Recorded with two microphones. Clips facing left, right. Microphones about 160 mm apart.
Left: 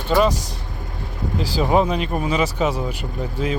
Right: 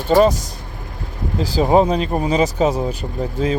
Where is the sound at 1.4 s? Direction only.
35° right (ahead or behind).